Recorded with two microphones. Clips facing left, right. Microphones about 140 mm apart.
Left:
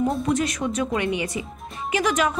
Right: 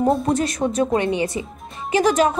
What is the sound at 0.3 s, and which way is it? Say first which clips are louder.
Speech: right 3 dB; 35° right (ahead or behind).